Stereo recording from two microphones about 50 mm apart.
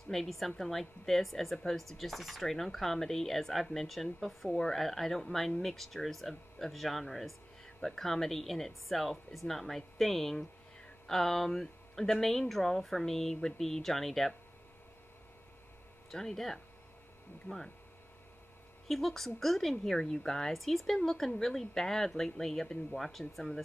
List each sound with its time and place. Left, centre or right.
0.1 s speech: centre
16.1 s a woman's voice: centre
17.5 s speech: left
18.9 s a woman's voice: centre